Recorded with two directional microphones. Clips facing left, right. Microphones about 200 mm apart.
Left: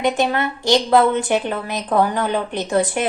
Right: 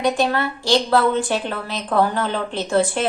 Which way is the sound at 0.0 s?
20° left (ahead or behind).